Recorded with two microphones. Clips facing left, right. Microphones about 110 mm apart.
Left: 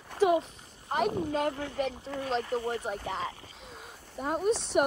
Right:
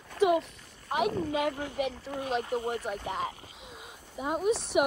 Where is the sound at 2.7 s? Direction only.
40° left (ahead or behind).